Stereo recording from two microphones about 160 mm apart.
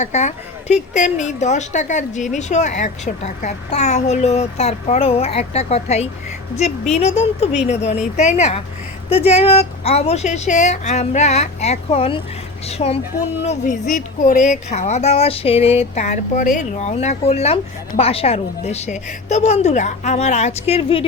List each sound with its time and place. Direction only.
0.0 s speech: 45° left (ahead or behind)